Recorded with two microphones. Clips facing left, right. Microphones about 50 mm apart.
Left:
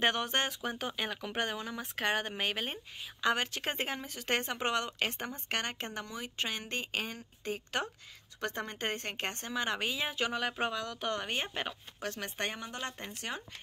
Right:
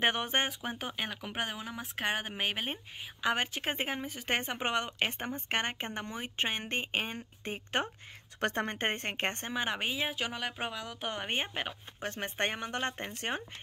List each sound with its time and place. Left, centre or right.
0.0 s speech: centre
8.4 s a woman's voice: right; by 10.0 s centre
10.0 s speech: centre
12.0 s a woman's voice: right